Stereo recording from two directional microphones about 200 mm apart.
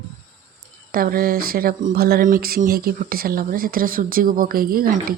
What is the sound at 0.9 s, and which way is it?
Speech, 45° right (ahead or behind).